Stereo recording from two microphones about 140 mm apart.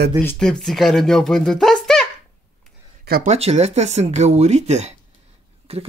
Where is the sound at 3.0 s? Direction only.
90° right.